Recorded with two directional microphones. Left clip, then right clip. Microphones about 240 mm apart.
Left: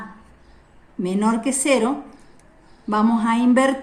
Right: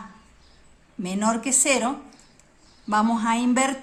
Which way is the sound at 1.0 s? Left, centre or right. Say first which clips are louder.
Left 3 dB; right.